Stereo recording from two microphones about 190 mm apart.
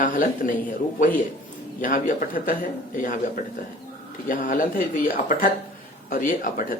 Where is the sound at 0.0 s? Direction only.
45° left (ahead or behind).